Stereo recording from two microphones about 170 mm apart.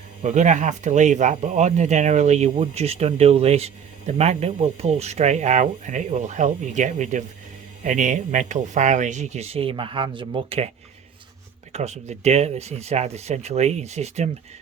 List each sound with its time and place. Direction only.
0.2 s speech: 45° right (ahead or behind)
11.7 s speech: 40° right (ahead or behind)